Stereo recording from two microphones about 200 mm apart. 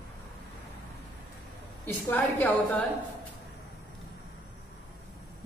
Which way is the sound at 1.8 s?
10° left (ahead or behind).